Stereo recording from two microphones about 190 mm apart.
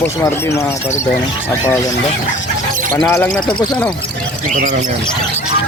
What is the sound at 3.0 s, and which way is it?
Speech, 10° left (ahead or behind).